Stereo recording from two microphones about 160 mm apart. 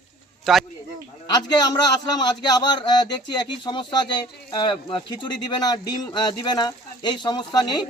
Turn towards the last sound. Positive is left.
turn(degrees=25)  # may be behind; listen again after turning